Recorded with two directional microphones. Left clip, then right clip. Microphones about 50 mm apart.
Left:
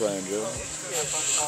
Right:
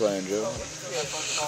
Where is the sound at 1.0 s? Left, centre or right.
Centre.